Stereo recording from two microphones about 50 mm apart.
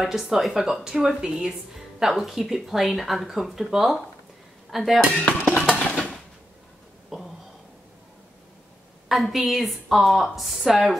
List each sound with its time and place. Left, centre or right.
0.0 s a woman's voice: centre
5.1 s dishes: left
5.9 s mechanisms: centre
7.1 s a sound: centre
9.1 s a woman's voice: centre